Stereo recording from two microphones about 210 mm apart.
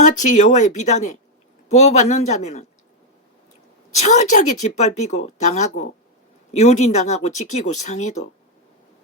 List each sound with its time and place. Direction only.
0.0 s speech: 35° left (ahead or behind)
3.9 s speech: 35° left (ahead or behind)